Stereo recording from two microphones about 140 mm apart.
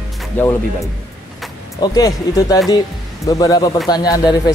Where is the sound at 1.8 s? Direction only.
25° left (ahead or behind).